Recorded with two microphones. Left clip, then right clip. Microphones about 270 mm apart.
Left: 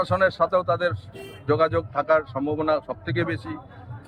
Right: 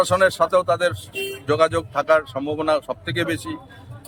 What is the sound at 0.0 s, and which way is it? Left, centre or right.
Speech, centre.